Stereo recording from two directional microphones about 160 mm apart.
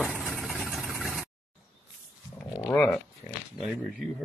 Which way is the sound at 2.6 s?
15° left (ahead or behind).